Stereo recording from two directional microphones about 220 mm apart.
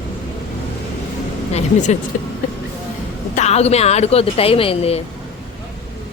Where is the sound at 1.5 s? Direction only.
30° left (ahead or behind).